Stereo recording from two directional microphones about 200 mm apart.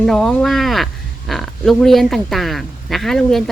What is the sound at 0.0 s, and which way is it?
Speech, centre (ahead or behind).